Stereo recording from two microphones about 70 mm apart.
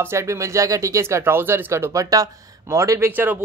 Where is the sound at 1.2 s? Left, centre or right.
Right.